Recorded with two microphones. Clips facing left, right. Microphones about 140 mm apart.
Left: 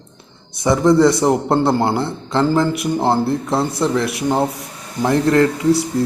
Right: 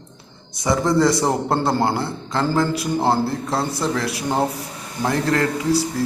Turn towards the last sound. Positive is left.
turn(degrees=20)  # may be behind; listen again after turning